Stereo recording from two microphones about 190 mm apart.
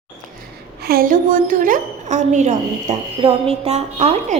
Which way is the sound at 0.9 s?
50° right (ahead or behind).